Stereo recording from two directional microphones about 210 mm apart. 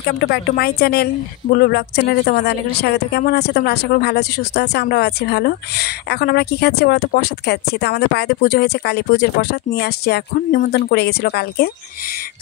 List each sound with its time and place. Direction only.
0.0 s speech: 50° left (ahead or behind)